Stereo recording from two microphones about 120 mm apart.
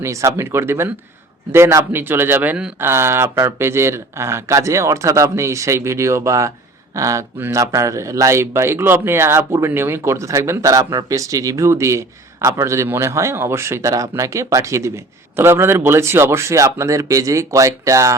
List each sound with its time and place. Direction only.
0.0 s speech: 25° right (ahead or behind)